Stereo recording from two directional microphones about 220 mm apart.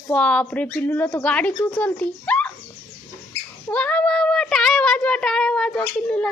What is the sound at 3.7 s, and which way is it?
Child singing, 5° left (ahead or behind).